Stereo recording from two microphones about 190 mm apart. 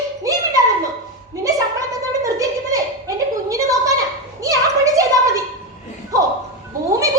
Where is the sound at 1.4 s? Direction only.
15° right (ahead or behind).